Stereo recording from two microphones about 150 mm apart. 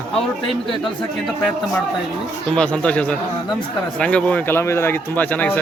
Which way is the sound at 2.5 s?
5° left (ahead or behind).